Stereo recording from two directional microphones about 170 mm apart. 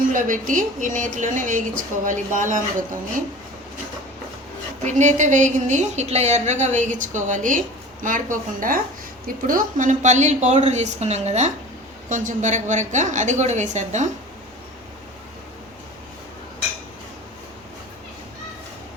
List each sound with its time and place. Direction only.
0.1 s a woman's voice: 50° right (ahead or behind)
4.8 s a woman's voice: 45° right (ahead or behind)